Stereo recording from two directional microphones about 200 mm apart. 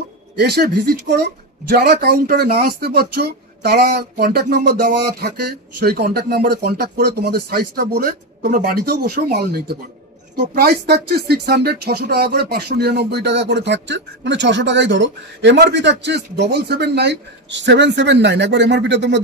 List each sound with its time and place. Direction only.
1.7 s speech: 50° right (ahead or behind)